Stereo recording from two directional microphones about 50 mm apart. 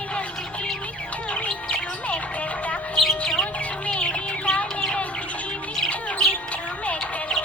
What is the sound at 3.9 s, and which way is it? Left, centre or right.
Music, left.